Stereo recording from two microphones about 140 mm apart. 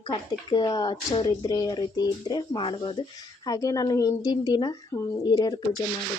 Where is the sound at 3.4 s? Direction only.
25° left (ahead or behind).